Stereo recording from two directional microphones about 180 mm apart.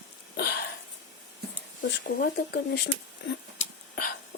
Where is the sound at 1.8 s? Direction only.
60° left (ahead or behind).